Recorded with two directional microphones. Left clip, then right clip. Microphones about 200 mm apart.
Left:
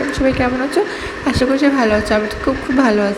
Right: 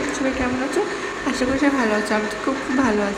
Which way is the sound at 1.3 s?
15° left (ahead or behind).